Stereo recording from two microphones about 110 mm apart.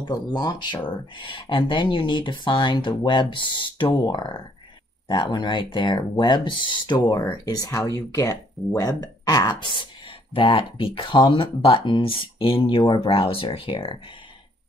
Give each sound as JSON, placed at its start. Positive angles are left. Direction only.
{"t": 0.0, "sound": "speech", "side_deg": 40}
{"t": 0.8, "sound": "speech", "side_deg": 50}